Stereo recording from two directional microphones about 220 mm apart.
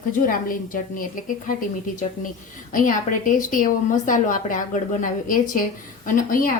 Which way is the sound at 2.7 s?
35° left (ahead or behind).